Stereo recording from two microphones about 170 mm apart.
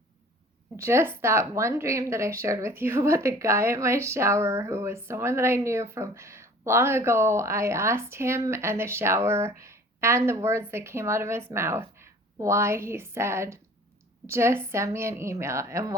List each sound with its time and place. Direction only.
0.8 s a woman's voice: 15° right (ahead or behind)